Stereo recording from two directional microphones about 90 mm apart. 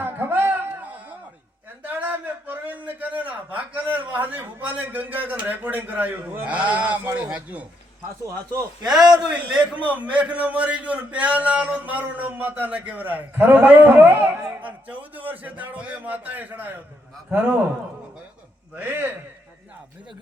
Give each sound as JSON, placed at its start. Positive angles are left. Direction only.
{"t": 0.0, "sound": "music", "side_deg": -25}
{"t": 1.8, "sound": "a sound", "side_deg": -20}
{"t": 6.4, "sound": "a man's voice", "side_deg": -15}
{"t": 9.0, "sound": "a man's voice", "side_deg": -10}
{"t": 18.8, "sound": "a man's voice", "side_deg": -20}